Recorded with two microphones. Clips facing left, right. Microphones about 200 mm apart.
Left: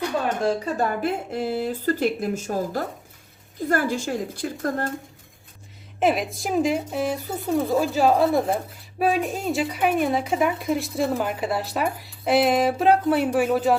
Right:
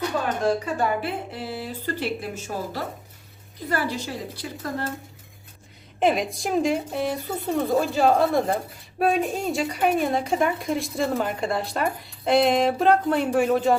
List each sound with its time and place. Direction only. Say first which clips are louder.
0.3 s speech: even; 40° left (ahead or behind)
6.0 s speech: even; centre (ahead or behind)